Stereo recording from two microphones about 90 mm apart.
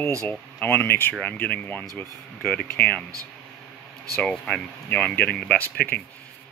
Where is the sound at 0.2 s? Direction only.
20° left (ahead or behind).